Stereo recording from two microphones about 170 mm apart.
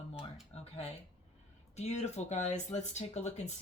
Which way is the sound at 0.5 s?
35° left (ahead or behind).